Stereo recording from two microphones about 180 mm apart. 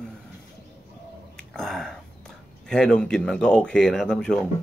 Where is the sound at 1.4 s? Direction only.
Centre (ahead or behind).